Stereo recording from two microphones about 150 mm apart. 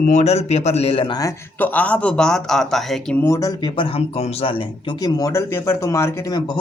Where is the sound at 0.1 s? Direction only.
50° left (ahead or behind).